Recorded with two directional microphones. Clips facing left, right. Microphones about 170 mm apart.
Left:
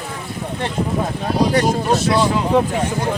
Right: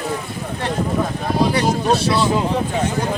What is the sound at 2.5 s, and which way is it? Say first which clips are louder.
Speech: left 6 dB; 60° left (ahead or behind).